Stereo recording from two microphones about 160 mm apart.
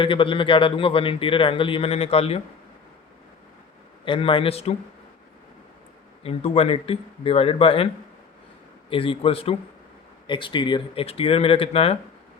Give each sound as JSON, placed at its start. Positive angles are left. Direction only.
{"t": 0.0, "sound": "a man's voice", "side_deg": 35}
{"t": 4.0, "sound": "a man's voice", "side_deg": 30}
{"t": 6.2, "sound": "a man's voice", "side_deg": 35}
{"t": 8.9, "sound": "a man's voice", "side_deg": 35}